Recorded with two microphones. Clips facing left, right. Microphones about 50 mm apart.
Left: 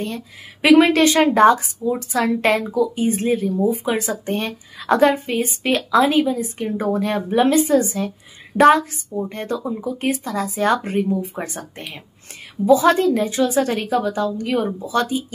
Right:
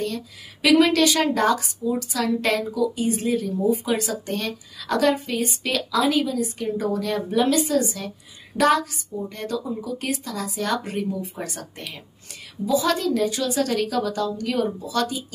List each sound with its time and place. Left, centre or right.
0.0 s a woman's voice: left